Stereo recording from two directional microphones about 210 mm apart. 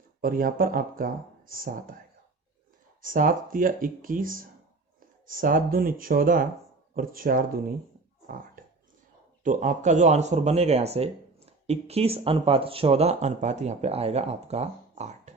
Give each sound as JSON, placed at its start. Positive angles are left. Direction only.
{"t": 0.2, "sound": "speech", "side_deg": -40}
{"t": 3.0, "sound": "speech", "side_deg": -40}
{"t": 9.4, "sound": "speech", "side_deg": -35}